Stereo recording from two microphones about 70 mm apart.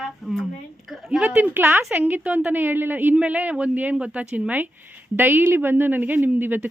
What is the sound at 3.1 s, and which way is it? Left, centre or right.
Speech, centre.